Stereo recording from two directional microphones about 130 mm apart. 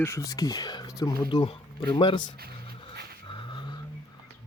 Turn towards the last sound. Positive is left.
turn(degrees=35)  # may be behind; listen again after turning